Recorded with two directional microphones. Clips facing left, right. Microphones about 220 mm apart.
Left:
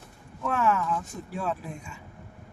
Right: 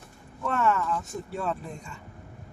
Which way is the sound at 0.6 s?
5° left (ahead or behind).